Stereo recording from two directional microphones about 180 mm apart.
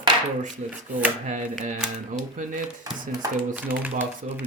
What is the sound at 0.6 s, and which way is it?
Speech, 40° right (ahead or behind).